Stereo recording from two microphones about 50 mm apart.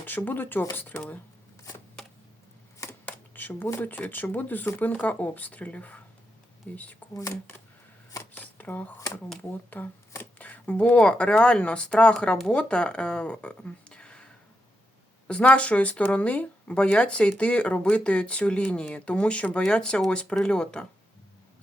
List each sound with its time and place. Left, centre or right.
0.0 s speech: left
3.1 s a sound: left
3.8 s speech: left
8.3 s a sound: left
9.4 s speech: left
15.3 s speech: left